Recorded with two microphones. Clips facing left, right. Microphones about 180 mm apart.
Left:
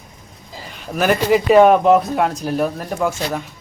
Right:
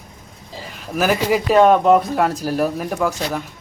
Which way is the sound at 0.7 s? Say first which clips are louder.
Left 1 dB; centre (ahead or behind).